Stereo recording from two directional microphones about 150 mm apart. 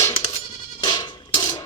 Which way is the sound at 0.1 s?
30° left (ahead or behind).